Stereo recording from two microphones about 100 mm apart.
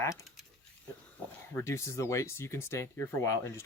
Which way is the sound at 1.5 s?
25° left (ahead or behind).